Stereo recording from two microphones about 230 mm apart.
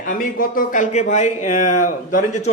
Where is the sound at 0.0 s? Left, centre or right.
Left.